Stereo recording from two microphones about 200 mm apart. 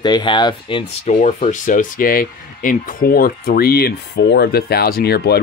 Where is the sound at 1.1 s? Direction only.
35° left (ahead or behind).